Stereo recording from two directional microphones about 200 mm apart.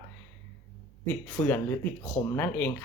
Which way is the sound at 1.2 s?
10° left (ahead or behind).